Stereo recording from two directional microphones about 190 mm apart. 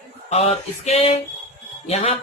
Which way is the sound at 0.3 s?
35° left (ahead or behind).